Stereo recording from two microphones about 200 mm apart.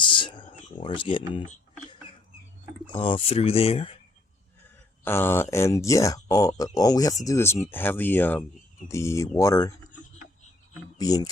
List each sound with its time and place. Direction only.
0.0 s a sound: 25° left (ahead or behind)
0.8 s speech: 25° left (ahead or behind)
3.0 s speech: 25° left (ahead or behind)
5.0 s speech: 10° left (ahead or behind)
10.9 s speech: 20° left (ahead or behind)